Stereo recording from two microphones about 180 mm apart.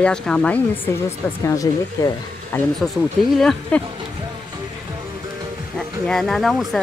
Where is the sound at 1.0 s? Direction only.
15° left (ahead or behind).